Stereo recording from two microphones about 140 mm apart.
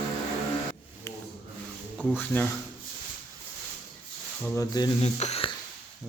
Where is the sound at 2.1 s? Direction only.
10° left (ahead or behind).